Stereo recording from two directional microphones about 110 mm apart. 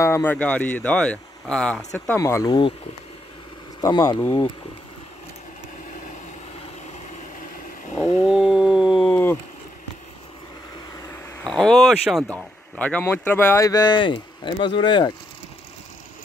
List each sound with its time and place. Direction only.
0.0 s speech: 20° left (ahead or behind)
2.0 s speech: 20° left (ahead or behind)
2.4 s speech: 40° left (ahead or behind)
3.8 s speech: 35° left (ahead or behind)
8.3 s a sound: 5° right (ahead or behind)
9.0 s insect: 15° left (ahead or behind)
11.4 s speech: 5° left (ahead or behind)
12.7 s speech: 15° left (ahead or behind)
13.7 s speech: 40° left (ahead or behind)